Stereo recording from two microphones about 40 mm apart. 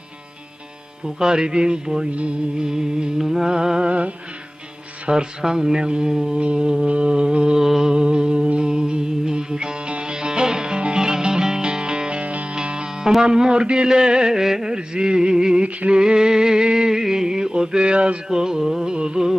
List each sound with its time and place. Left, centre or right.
1.0 s a sound: centre
2.6 s speech: centre
3.8 s music: right
5.0 s speech: centre
6.4 s a sound: right
6.8 s mantra: right
7.6 s music: centre; by 12.5 s right
12.5 s music: right
13.2 s a sound: right
15.9 s music: right
18.3 s speech: centre
18.9 s a sound: centre